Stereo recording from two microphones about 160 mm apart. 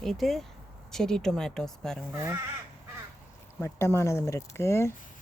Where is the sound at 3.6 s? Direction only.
15° left (ahead or behind).